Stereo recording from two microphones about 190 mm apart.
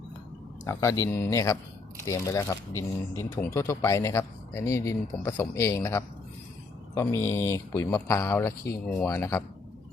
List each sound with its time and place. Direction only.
0.6 s speech: 15° left (ahead or behind)